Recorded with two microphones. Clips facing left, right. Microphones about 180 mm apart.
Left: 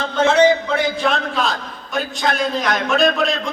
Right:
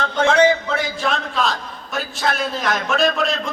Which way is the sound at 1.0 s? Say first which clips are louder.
Left 2 dB; centre (ahead or behind).